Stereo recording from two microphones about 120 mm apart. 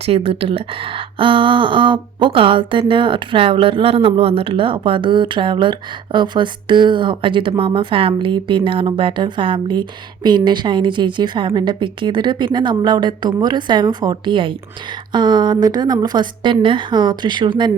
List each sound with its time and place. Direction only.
0.0 s a woman's voice: 50° right (ahead or behind)